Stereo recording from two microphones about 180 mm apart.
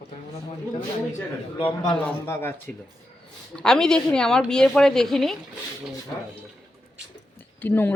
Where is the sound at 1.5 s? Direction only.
25° left (ahead or behind).